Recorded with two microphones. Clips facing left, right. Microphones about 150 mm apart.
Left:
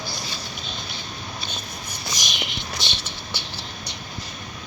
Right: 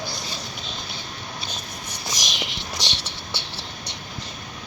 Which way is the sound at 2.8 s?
90° right.